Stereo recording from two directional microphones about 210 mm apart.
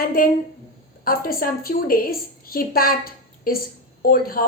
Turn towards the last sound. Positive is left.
turn(degrees=45)  # may be behind; listen again after turning